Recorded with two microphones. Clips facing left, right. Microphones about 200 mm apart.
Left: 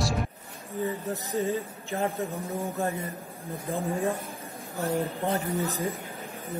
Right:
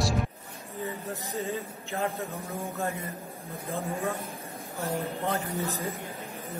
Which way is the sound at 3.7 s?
15° left (ahead or behind).